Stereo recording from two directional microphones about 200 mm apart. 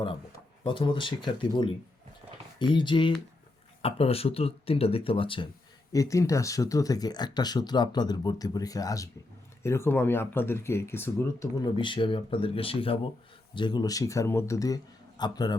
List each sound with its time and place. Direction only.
0.6 s speech: 25° left (ahead or behind)